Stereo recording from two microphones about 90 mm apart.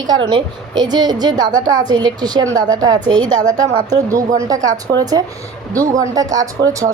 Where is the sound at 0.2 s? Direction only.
65° right (ahead or behind).